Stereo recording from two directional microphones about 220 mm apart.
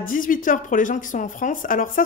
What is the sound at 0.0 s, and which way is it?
A woman's voice, 40° left (ahead or behind).